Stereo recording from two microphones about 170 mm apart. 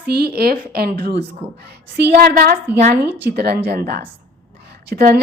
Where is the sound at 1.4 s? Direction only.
35° right (ahead or behind).